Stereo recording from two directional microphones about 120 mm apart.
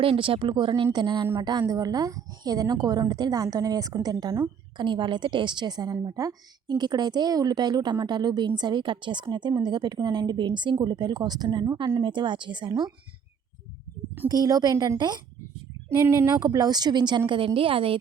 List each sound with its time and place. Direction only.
0.0 s a woman's voice: 50° right (ahead or behind)
14.3 s a woman's voice: 30° right (ahead or behind)
15.9 s speech: 20° right (ahead or behind)
16.4 s a woman's voice: 30° right (ahead or behind); by 17.9 s 50° right (ahead or behind)